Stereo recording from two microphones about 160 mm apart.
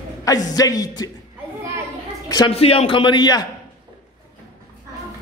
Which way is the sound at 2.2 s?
25° left (ahead or behind).